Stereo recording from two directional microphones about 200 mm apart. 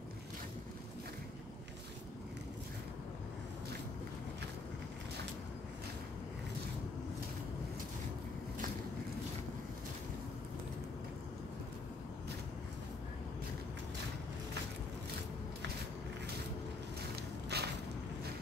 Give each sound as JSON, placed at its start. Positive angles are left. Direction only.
{"t": 17.1, "sound": "walk", "side_deg": -55}